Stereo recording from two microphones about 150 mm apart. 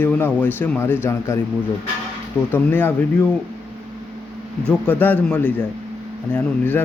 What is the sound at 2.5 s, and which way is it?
Speech, 15° left (ahead or behind).